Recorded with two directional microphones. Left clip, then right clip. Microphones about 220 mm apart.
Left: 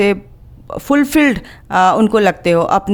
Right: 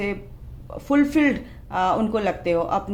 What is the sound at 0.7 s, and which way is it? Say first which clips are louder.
Speech: left 7 dB; 50° left (ahead or behind).